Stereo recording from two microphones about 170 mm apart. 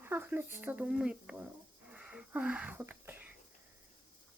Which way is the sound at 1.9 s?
5° right (ahead or behind).